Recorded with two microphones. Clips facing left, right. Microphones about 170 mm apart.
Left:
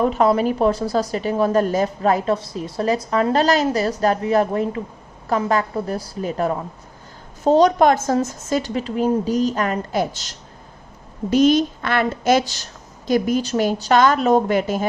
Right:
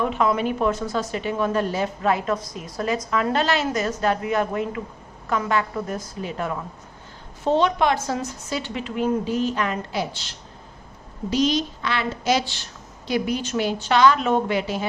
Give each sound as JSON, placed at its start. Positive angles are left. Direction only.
{"t": 0.0, "sound": "a woman's voice", "side_deg": 40}